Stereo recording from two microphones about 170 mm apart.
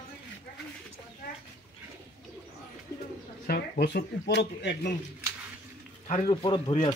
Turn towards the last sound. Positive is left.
turn(degrees=30)  # may be behind; listen again after turning